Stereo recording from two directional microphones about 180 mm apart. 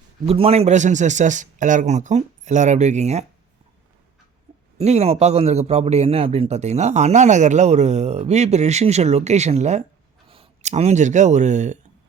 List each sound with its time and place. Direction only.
0.3 s a man's voice: 35° right (ahead or behind)
4.8 s a man's voice: 35° right (ahead or behind)